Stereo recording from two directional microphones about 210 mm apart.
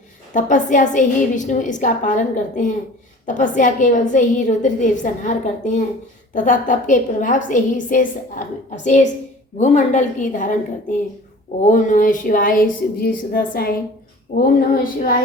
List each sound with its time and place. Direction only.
0.3 s a woman's voice: 35° left (ahead or behind)